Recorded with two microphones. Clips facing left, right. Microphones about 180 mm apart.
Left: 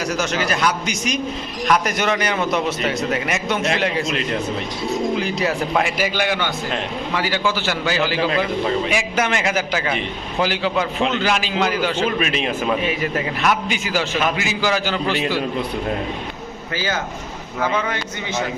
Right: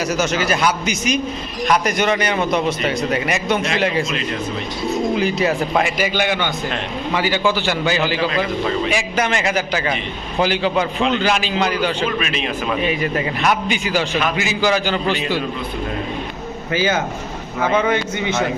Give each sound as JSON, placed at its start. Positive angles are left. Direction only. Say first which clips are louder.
{"t": 0.0, "sound": "a man's voice", "louder": "right 2 dB", "side_deg": -5}
{"t": 5.2, "sound": "a man's voice", "louder": "right 3 dB", "side_deg": 0}
{"t": 7.3, "sound": "a man's voice", "louder": "right 4 dB", "side_deg": -15}
{"t": 8.9, "sound": "a man's voice", "louder": "right 1 dB", "side_deg": 5}
{"t": 12.2, "sound": "a man's voice", "louder": "left 2 dB", "side_deg": 45}
{"t": 12.8, "sound": "a man's voice", "louder": "right 2 dB", "side_deg": 5}
{"t": 16.7, "sound": "a man's voice", "louder": "right 5 dB", "side_deg": -20}